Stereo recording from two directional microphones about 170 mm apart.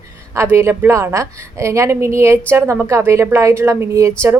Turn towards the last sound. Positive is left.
turn(degrees=-15)  # may be behind; listen again after turning